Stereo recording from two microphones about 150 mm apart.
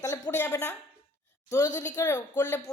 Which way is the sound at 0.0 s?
20° left (ahead or behind).